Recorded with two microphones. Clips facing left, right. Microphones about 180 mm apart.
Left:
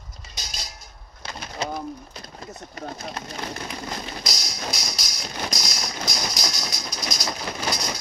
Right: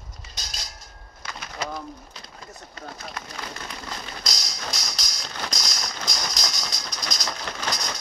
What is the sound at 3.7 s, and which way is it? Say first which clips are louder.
Music: left 4 dB; 10° left (ahead or behind).